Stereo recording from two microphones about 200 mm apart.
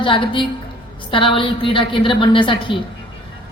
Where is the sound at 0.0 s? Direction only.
25° left (ahead or behind).